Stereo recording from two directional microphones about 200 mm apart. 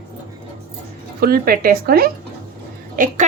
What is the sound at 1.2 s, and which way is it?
A woman's voice, 50° right (ahead or behind).